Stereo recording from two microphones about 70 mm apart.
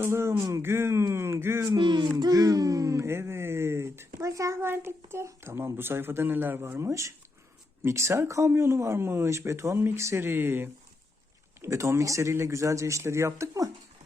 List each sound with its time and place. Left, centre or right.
0.0 s speech: right
1.7 s a child's voice: right
3.1 s a sound: right
4.6 s speech: right
11.6 s speech: right